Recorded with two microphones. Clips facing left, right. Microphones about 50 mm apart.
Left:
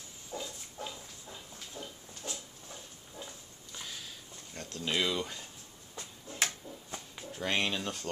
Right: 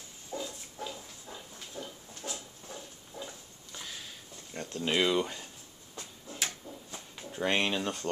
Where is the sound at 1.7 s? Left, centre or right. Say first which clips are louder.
Right 3 dB; right.